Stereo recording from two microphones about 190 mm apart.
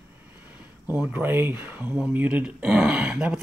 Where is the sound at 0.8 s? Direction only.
10° right (ahead or behind).